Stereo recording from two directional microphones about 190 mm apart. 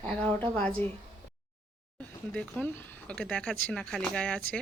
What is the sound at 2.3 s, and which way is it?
Speech, 5° left (ahead or behind).